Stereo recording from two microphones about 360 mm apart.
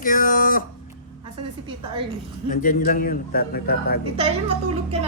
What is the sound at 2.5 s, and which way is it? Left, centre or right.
Speech, left.